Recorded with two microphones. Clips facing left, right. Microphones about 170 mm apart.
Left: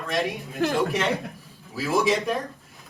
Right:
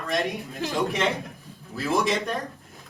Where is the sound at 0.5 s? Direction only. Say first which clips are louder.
Left 6 dB; 60° left (ahead or behind).